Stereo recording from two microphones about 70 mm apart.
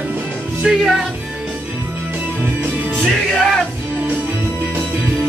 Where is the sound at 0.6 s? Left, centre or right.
Centre.